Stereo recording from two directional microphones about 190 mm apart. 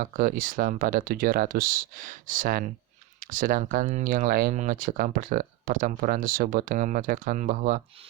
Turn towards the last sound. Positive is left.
turn(degrees=-45)  # may be behind; listen again after turning